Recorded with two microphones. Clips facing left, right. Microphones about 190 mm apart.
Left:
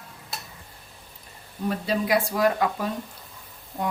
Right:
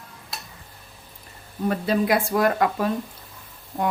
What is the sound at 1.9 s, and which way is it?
Speech, 55° right (ahead or behind).